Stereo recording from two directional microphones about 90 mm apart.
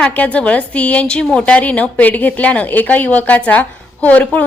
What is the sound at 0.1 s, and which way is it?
A woman's voice, 15° left (ahead or behind).